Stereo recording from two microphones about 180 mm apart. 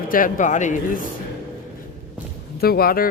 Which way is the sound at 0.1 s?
45° left (ahead or behind).